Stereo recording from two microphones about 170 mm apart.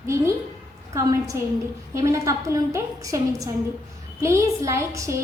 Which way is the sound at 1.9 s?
20° right (ahead or behind).